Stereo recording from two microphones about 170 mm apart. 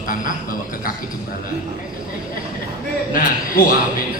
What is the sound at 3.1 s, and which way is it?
Speech, 55° left (ahead or behind).